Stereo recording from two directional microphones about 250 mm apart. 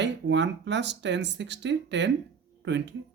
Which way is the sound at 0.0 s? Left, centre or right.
Right.